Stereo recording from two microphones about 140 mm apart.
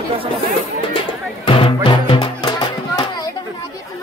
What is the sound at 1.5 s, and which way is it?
Music, 40° left (ahead or behind).